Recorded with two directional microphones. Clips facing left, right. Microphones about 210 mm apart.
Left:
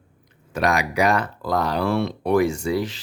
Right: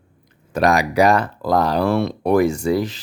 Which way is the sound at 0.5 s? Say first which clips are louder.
Right 5 dB; 35° right (ahead or behind).